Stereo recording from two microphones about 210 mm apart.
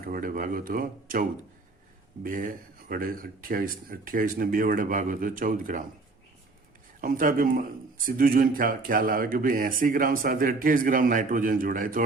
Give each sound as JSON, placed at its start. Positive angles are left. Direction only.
{"t": 0.0, "sound": "a man's voice", "side_deg": -45}
{"t": 7.0, "sound": "a man's voice", "side_deg": -40}